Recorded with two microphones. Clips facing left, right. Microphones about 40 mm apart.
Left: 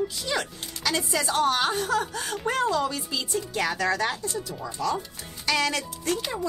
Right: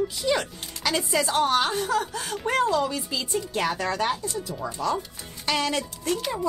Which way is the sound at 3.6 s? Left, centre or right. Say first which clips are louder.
Left 1 dB; right.